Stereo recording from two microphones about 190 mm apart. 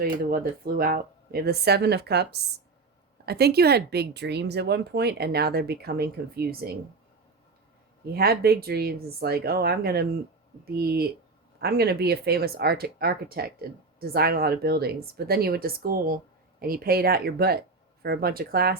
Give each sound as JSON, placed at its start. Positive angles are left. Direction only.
{"t": 0.0, "sound": "speech", "side_deg": -50}
{"t": 8.1, "sound": "speech", "side_deg": -55}